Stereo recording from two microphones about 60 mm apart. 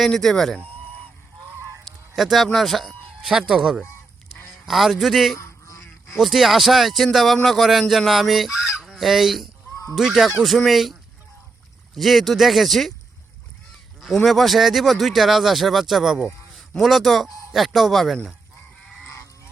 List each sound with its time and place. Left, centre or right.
0.0 s goose: centre
1.8 s speech: centre
4.6 s goose: centre
5.4 s goose: left
6.1 s goose: centre
11.9 s goose: centre
14.2 s goose: centre